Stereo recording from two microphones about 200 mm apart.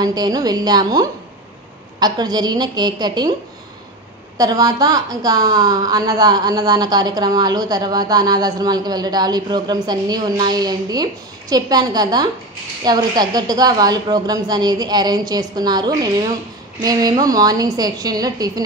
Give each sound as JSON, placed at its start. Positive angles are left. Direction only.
{"t": 0.0, "sound": "a woman's voice", "side_deg": -20}
{"t": 4.4, "sound": "a woman's voice", "side_deg": -20}